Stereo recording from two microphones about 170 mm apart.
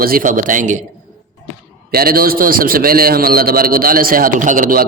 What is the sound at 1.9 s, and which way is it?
A man's voice, 60° right (ahead or behind).